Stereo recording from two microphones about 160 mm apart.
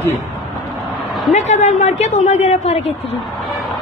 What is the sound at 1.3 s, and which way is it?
Speech, 45° left (ahead or behind).